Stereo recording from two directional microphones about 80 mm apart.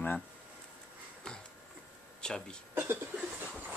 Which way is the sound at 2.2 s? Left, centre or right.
Centre.